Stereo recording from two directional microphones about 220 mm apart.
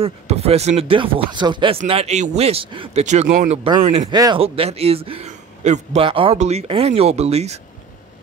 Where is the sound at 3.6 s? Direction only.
20° right (ahead or behind).